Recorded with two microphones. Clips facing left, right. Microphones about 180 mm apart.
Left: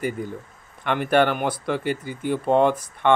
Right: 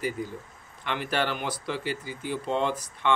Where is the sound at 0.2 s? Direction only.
55° left (ahead or behind).